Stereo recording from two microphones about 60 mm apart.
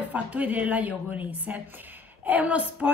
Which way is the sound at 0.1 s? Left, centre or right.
Right.